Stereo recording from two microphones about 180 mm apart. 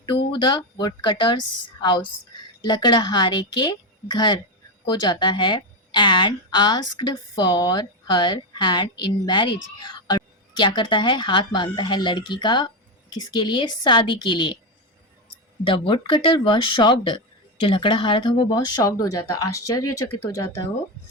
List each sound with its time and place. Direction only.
0.3 s a woman's voice: 25° left (ahead or behind)
15.6 s a woman's voice: 30° left (ahead or behind)